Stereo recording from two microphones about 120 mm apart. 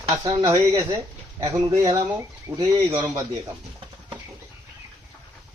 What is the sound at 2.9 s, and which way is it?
Speech, 30° right (ahead or behind).